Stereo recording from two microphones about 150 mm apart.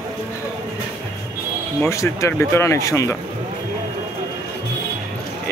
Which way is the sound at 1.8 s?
20° left (ahead or behind).